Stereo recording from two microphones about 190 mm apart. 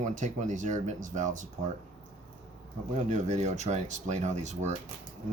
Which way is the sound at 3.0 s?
40° right (ahead or behind).